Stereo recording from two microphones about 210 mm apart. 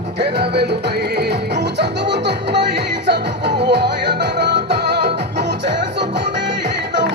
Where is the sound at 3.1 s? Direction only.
55° right (ahead or behind).